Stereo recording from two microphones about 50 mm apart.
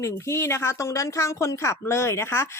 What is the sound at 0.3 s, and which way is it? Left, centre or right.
Speech, left.